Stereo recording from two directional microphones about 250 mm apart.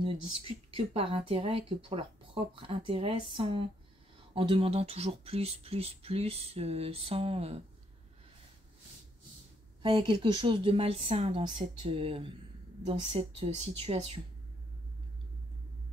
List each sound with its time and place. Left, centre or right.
0.0 s a sound: centre
0.3 s speech: right
0.7 s speech: right
9.8 s speech: centre